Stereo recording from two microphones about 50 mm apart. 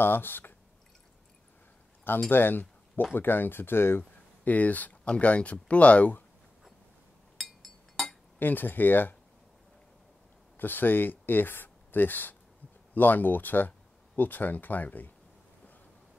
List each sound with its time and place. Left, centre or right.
0.0 s speech: left
2.2 s speech: left
4.5 s speech: left
7.3 s chink: centre
8.4 s speech: left
10.6 s speech: left